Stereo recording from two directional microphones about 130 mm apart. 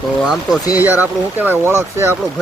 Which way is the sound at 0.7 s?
15° right (ahead or behind).